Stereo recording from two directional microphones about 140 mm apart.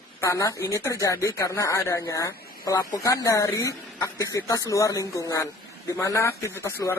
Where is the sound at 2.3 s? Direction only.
90° left.